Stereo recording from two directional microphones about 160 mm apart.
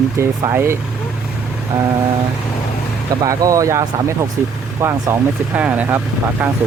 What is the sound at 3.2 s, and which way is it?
Speech, 20° right (ahead or behind).